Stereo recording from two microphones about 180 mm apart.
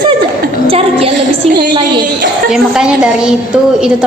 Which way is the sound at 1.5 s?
25° right (ahead or behind).